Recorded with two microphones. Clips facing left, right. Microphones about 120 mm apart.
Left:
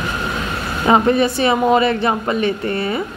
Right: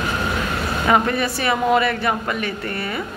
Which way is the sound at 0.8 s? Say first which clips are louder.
Left 5 dB; 25° left (ahead or behind).